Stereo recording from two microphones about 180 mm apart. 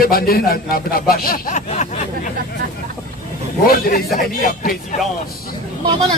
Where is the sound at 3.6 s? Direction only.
55° left (ahead or behind).